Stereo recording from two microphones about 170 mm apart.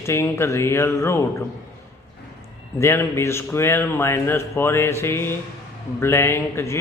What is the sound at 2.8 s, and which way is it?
Mantra, 15° left (ahead or behind).